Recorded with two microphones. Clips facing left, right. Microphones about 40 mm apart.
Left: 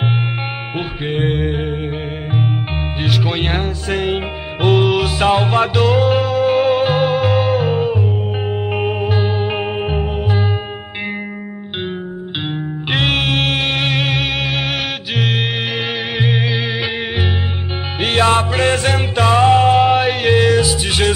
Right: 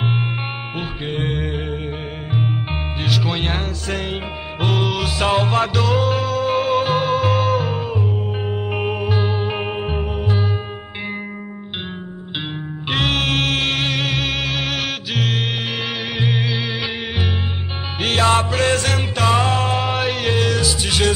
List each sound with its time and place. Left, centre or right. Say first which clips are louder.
0.7 s music: left 6 dB; centre
3.3 s music: left 3 dB; centre
7.2 s music: left 3 dB; centre
7.4 s music: left 4 dB; left
12.9 s music: left 2 dB; left
18.0 s music: left 2 dB; centre
18.6 s music: left 3 dB; left